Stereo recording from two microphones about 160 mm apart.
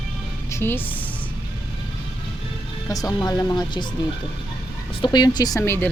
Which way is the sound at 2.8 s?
20° left (ahead or behind).